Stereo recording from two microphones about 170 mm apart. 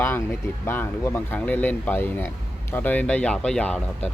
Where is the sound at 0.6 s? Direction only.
15° left (ahead or behind).